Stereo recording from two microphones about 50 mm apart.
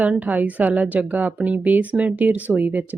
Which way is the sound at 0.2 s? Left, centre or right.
Right.